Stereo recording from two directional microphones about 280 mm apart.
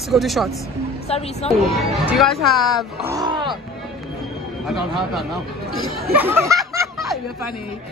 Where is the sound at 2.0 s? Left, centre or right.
Centre.